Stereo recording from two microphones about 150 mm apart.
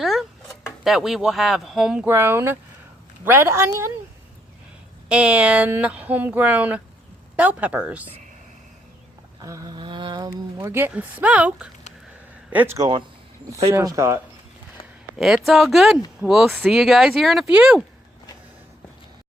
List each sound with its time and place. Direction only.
0.0 s a sound: centre (ahead or behind)
0.9 s speech: centre (ahead or behind); by 3.8 s 15° right (ahead or behind)
5.0 s speech: 10° right (ahead or behind)
9.4 s speech: 25° right (ahead or behind)
12.7 s speech: 25° right (ahead or behind)
15.4 s speech: centre (ahead or behind)